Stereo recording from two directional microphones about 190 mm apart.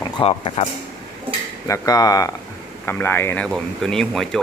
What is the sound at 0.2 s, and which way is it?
Speech, 30° left (ahead or behind).